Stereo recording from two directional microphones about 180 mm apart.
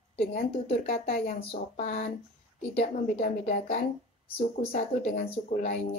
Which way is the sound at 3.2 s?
55° left (ahead or behind).